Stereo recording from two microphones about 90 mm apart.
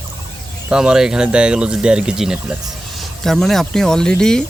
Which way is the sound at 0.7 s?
10° right (ahead or behind).